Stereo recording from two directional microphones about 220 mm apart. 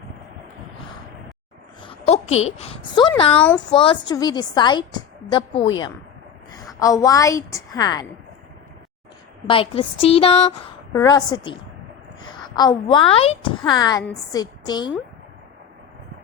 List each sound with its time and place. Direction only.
1.8 s a woman's voice: 25° left (ahead or behind)
3.3 s speech: 5° left (ahead or behind)
3.7 s a woman's voice: 20° left (ahead or behind)
9.5 s a woman's voice: 25° left (ahead or behind)
10.9 s a woman's voice: 15° left (ahead or behind)
12.5 s a woman's voice: 20° left (ahead or behind)